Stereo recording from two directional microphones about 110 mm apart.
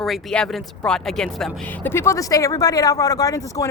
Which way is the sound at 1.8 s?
25° left (ahead or behind).